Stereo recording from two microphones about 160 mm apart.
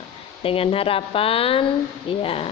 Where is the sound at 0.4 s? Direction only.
35° left (ahead or behind).